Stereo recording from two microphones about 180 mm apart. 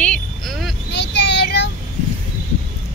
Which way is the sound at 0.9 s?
70° left (ahead or behind).